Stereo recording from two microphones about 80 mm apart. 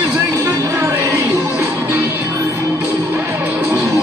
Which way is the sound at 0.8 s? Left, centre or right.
Right.